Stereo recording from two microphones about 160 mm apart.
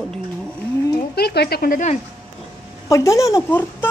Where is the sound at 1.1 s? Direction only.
85° left; by 1.9 s 55° left (ahead or behind).